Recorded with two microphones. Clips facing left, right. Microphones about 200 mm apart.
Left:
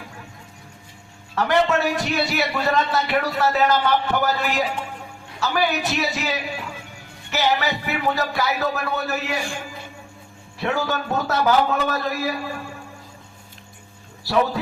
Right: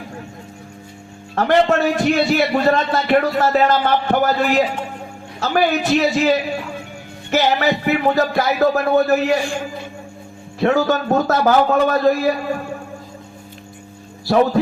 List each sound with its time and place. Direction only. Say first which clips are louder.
1.4 s a man's voice: right 4 dB; 50° right (ahead or behind)
10.6 s a man's voice: right 8 dB; 45° right (ahead or behind)
14.3 s a man's voice: right 6 dB; 50° right (ahead or behind)